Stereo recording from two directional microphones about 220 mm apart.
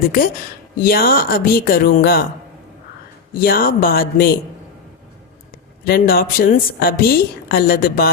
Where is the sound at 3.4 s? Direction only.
40° left (ahead or behind).